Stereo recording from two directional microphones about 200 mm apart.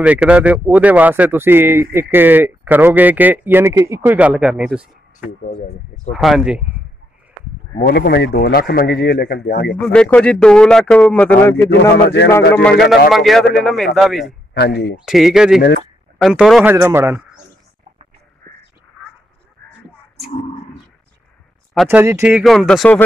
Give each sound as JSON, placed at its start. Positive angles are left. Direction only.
{"t": 0.0, "sound": "speech", "side_deg": -5}
{"t": 6.1, "sound": "speech", "side_deg": 0}
{"t": 7.7, "sound": "speech", "side_deg": 50}
{"t": 9.8, "sound": "speech", "side_deg": 5}
{"t": 11.9, "sound": "speech", "side_deg": 55}
{"t": 12.5, "sound": "speech", "side_deg": 5}
{"t": 14.5, "sound": "speech", "side_deg": 55}
{"t": 15.0, "sound": "speech", "side_deg": 0}
{"t": 16.7, "sound": "speech", "side_deg": -15}
{"t": 21.8, "sound": "speech", "side_deg": -10}